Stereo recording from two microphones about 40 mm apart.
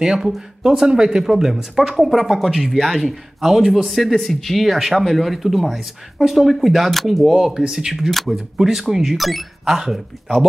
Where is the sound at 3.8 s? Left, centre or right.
Centre.